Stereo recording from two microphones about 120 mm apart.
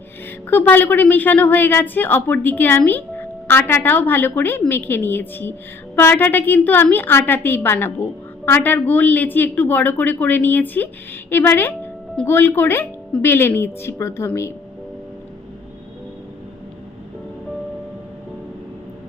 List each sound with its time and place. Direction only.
0.5 s a woman's voice: 15° left (ahead or behind)